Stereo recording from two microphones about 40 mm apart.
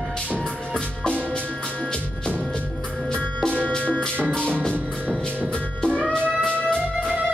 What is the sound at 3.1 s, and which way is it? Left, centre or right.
Music, left.